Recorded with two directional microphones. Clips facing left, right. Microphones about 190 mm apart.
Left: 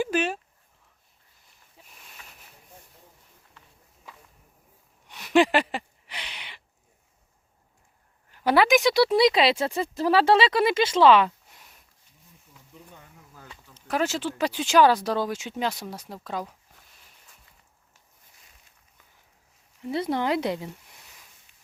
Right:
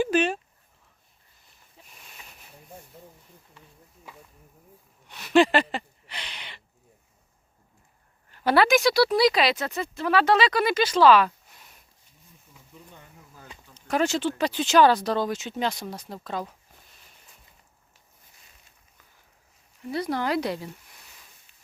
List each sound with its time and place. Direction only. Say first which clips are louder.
0.0 s speech: right 3 dB; 5° left (ahead or behind)
1.8 s a sound: right 1 dB; 10° left (ahead or behind)
5.0 s a sound: right 1 dB; 15° left (ahead or behind)
8.3 s speech: even; 15° left (ahead or behind)
13.7 s speech: right 2 dB; 5° left (ahead or behind)
19.9 s speech: left 1 dB; 25° left (ahead or behind)